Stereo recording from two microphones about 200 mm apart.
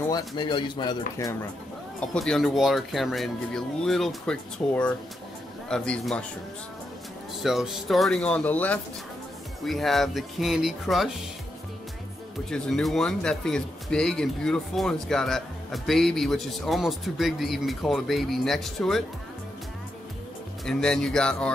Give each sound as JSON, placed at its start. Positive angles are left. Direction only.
{"t": 0.4, "sound": "speech", "side_deg": 20}
{"t": 2.0, "sound": "speech", "side_deg": 5}
{"t": 7.4, "sound": "speech", "side_deg": 0}
{"t": 12.4, "sound": "speech", "side_deg": 0}
{"t": 20.6, "sound": "speech", "side_deg": 5}